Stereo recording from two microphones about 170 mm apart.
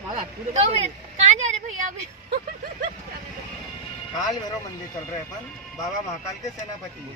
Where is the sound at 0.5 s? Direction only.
40° right (ahead or behind).